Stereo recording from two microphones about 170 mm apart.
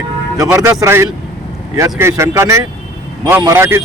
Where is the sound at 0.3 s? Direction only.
20° right (ahead or behind).